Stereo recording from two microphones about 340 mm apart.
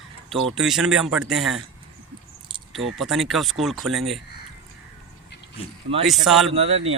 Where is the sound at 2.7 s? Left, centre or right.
Centre.